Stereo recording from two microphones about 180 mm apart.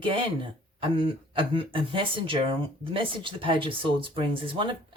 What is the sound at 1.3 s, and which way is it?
Speech, 30° right (ahead or behind).